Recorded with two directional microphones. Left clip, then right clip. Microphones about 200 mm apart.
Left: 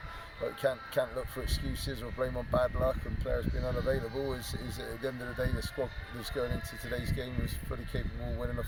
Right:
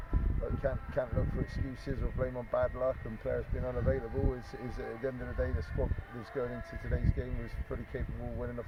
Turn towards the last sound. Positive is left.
turn(degrees=10)  # may be behind; listen again after turning